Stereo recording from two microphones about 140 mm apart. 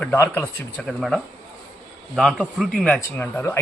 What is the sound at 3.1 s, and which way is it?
Speech, 15° left (ahead or behind).